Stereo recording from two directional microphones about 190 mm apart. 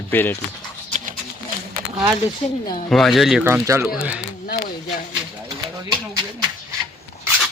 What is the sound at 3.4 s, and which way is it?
Speech, 15° right (ahead or behind).